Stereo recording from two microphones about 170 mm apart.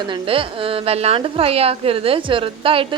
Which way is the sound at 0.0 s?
30° right (ahead or behind).